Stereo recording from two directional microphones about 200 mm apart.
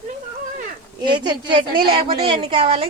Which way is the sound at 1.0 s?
20° right (ahead or behind).